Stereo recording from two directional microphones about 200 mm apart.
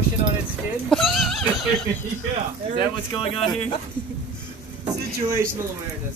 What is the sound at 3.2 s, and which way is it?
Speech, 30° left (ahead or behind).